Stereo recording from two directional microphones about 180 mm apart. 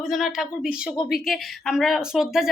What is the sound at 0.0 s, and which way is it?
A woman's voice, centre (ahead or behind).